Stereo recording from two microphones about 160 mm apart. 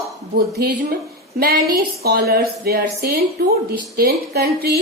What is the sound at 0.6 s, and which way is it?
A woman's voice, 80° right.